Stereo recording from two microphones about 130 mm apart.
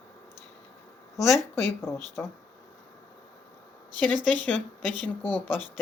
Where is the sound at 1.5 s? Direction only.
20° left (ahead or behind).